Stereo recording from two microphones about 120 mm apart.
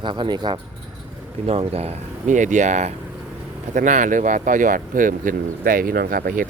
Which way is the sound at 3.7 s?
90° right.